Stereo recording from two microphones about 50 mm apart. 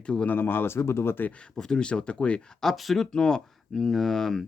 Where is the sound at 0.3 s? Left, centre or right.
Left.